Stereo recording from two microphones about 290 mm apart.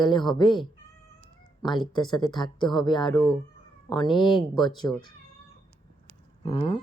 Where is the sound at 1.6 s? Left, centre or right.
Centre.